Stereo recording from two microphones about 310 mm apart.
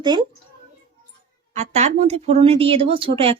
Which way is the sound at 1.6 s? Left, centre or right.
Right.